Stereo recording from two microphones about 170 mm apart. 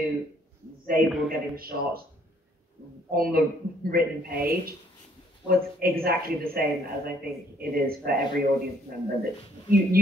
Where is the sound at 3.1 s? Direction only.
60° right (ahead or behind).